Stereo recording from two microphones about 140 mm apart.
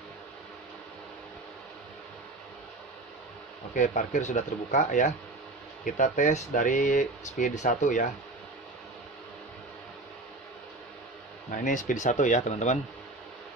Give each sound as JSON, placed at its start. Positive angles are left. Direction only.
{"t": 3.7, "sound": "speech", "side_deg": 60}
{"t": 11.5, "sound": "speech", "side_deg": 70}